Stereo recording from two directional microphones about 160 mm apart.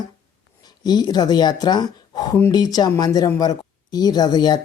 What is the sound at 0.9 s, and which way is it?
Speech, 25° left (ahead or behind).